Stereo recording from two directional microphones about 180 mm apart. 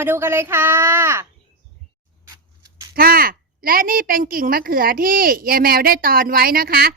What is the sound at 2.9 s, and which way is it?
A woman's voice, 55° right (ahead or behind).